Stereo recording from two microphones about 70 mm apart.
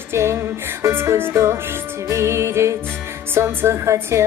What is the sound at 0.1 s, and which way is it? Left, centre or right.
Music, right.